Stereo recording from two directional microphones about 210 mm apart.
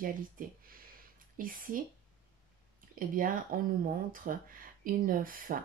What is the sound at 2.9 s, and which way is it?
Speech, 40° right (ahead or behind).